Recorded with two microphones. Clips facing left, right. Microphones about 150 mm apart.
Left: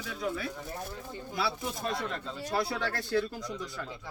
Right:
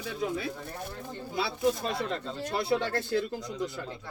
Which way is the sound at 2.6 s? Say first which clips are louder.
Right 5 dB; 25° right (ahead or behind).